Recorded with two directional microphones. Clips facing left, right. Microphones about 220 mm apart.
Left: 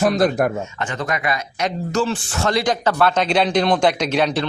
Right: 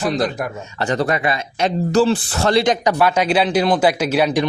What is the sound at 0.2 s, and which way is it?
Speech, 50° left (ahead or behind).